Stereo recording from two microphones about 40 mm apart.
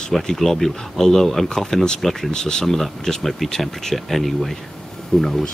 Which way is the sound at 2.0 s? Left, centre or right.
Centre.